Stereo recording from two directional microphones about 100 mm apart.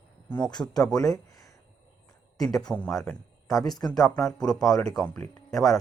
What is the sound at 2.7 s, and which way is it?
Speech, 15° right (ahead or behind).